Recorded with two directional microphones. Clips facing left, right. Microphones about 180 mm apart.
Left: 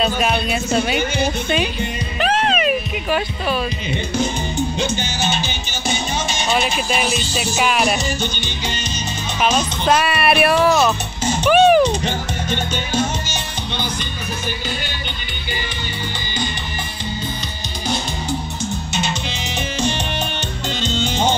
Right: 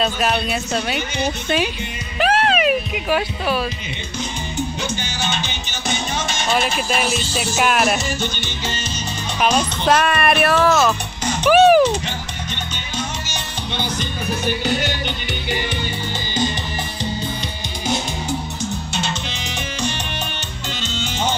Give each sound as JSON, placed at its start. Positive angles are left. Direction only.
{"t": 0.0, "sound": "speech", "side_deg": 0}
{"t": 0.9, "sound": "a woman's voice", "side_deg": 50}
{"t": 2.1, "sound": "speech", "side_deg": -10}
{"t": 5.9, "sound": "speech", "side_deg": 0}
{"t": 9.8, "sound": "speech", "side_deg": 10}
{"t": 11.4, "sound": "music", "side_deg": -5}
{"t": 12.0, "sound": "music", "side_deg": 50}
{"t": 14.7, "sound": "music", "side_deg": -75}
{"t": 19.2, "sound": "music", "side_deg": 20}